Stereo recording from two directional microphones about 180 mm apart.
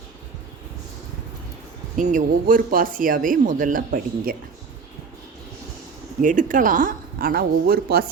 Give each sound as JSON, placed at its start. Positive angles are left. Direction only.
{"t": 2.0, "sound": "speech", "side_deg": -45}
{"t": 6.2, "sound": "speech", "side_deg": -45}